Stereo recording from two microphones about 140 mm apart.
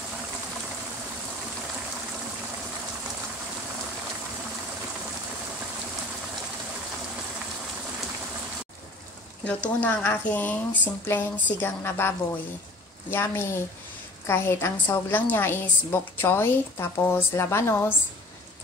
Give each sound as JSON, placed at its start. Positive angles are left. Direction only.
{"t": 9.4, "sound": "a woman's voice", "side_deg": 10}
{"t": 13.1, "sound": "a woman's voice", "side_deg": 15}